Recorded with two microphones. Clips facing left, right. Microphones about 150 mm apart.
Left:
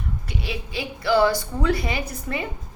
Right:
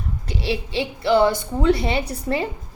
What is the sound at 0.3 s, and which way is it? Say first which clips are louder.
A woman's voice: right 9 dB; 35° right (ahead or behind).